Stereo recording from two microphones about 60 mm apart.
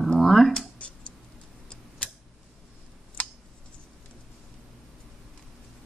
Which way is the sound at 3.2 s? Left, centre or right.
Left.